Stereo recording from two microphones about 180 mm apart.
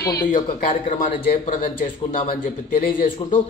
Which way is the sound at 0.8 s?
45° left (ahead or behind).